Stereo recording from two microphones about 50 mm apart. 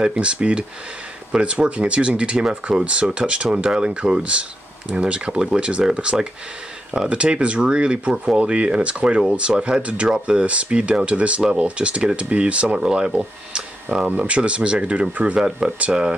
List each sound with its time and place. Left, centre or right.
0.0 s speech: centre